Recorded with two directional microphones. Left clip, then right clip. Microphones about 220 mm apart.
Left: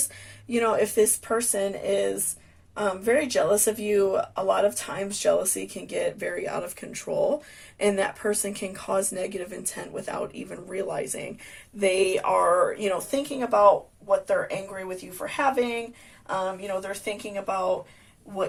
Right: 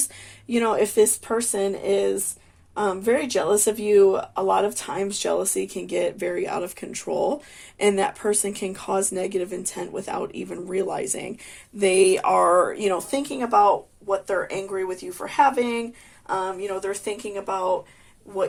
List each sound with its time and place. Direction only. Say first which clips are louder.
0.5 s speech: right 2 dB; 40° right (ahead or behind)